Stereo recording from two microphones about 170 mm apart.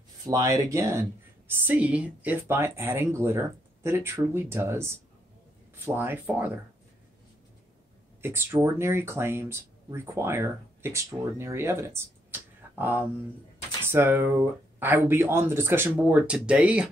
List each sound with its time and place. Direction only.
0.2 s speech: 20° right (ahead or behind)
8.2 s speech: 15° right (ahead or behind)